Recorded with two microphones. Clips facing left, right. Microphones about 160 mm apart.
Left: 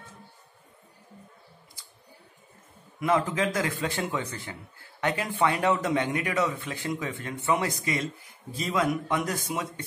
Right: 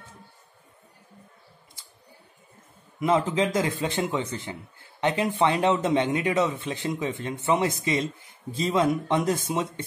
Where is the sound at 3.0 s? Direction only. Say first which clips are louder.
Right 2 dB; 20° right (ahead or behind).